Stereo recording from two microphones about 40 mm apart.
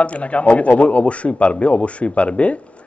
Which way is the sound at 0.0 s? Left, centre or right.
Left.